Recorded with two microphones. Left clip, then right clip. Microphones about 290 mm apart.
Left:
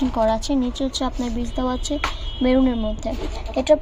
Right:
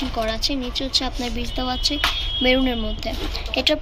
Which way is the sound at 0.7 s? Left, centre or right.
Centre.